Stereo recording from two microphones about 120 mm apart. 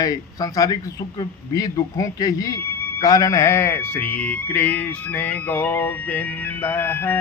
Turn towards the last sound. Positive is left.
turn(degrees=15)  # may be behind; listen again after turning